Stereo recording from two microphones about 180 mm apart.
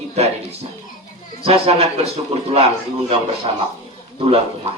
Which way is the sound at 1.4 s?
35° right (ahead or behind).